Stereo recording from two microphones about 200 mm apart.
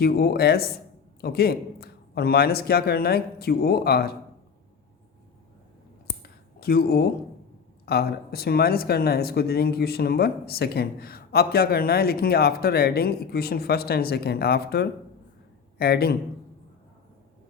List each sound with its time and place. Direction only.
0.0 s speech: 50° left (ahead or behind)
6.1 s a sound: 50° left (ahead or behind)
7.9 s speech: 50° left (ahead or behind)